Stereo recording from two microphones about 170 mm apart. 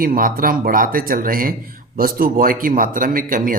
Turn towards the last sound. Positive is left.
turn(degrees=-55)  # may be behind; listen again after turning